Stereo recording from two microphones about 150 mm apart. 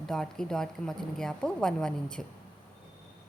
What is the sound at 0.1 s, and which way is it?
A woman's voice, 5° left (ahead or behind).